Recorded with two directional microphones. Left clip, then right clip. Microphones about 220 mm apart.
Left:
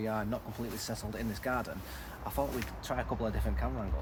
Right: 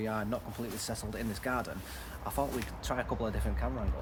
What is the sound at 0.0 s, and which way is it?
Speech, 10° right (ahead or behind).